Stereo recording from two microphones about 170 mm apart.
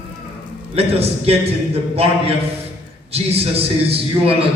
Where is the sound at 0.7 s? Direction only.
35° right (ahead or behind).